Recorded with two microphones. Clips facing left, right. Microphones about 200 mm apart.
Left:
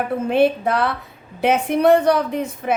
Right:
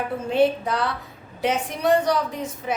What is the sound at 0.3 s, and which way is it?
A woman's voice, 60° left (ahead or behind).